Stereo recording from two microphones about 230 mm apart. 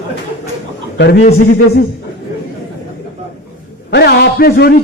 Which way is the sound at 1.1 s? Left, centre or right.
Left.